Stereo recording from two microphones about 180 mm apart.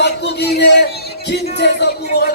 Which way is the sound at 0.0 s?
70° left (ahead or behind).